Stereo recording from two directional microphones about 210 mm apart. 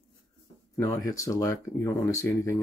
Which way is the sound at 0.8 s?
15° left (ahead or behind).